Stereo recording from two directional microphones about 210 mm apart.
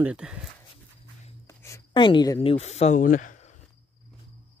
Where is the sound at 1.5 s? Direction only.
15° left (ahead or behind); by 3.6 s 35° left (ahead or behind).